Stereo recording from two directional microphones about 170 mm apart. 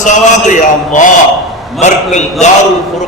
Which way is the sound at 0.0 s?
45° left (ahead or behind).